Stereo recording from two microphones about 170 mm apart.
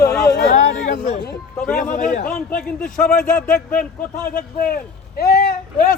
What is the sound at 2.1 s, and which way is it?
Speech, 60° left (ahead or behind).